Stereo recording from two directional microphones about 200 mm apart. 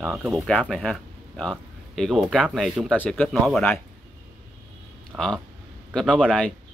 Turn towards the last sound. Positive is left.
turn(degrees=5)  # may be behind; listen again after turning